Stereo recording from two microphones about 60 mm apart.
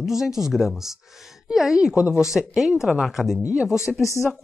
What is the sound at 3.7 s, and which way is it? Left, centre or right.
Speech, left.